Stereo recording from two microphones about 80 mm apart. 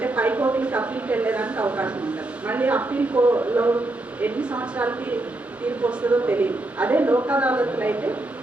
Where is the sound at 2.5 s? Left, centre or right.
Right.